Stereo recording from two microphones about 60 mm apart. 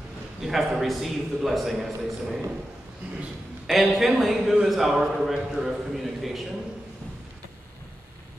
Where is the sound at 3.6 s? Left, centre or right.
Centre.